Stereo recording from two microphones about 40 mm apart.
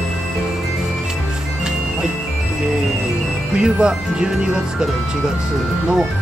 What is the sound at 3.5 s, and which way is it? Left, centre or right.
Speech, centre.